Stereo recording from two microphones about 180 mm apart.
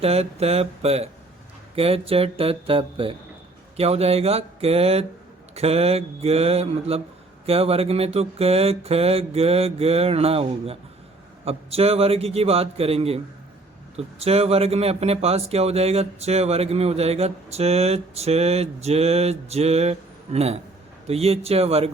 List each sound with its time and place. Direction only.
0.0 s speech: 35° right (ahead or behind)